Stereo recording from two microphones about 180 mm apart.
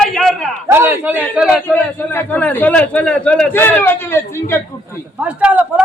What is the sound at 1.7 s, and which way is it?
A man's voice, 10° left (ahead or behind).